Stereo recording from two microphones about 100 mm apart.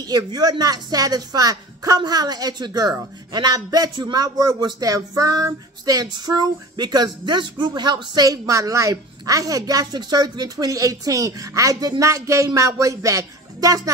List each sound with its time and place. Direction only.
0.0 s speech: 40° right (ahead or behind)